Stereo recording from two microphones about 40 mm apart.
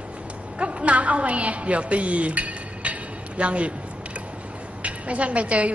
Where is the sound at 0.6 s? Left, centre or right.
Right.